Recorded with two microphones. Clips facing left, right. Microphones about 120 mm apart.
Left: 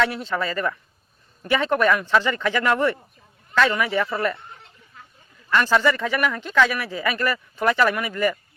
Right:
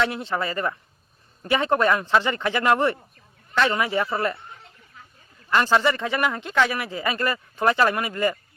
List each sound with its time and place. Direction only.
0.0 s speech: 25° right (ahead or behind)
5.5 s speech: 30° right (ahead or behind)